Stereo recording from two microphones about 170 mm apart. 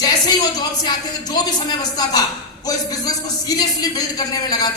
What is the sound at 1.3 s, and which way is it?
A man's voice, 25° left (ahead or behind).